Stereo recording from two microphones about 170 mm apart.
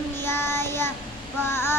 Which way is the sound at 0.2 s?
15° left (ahead or behind).